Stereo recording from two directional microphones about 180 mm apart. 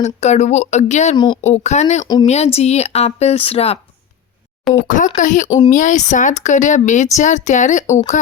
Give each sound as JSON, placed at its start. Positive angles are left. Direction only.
{"t": 0.0, "sound": "a woman's voice", "side_deg": 40}
{"t": 1.1, "sound": "speech", "side_deg": 25}
{"t": 1.4, "sound": "a woman's voice", "side_deg": 40}
{"t": 4.7, "sound": "speech", "side_deg": 0}
{"t": 5.1, "sound": "a woman's voice", "side_deg": 45}
{"t": 5.5, "sound": "speech", "side_deg": 25}
{"t": 5.7, "sound": "a woman's voice", "side_deg": 45}